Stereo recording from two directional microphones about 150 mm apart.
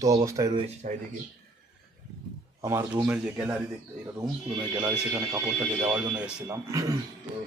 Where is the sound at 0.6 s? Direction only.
50° right (ahead or behind).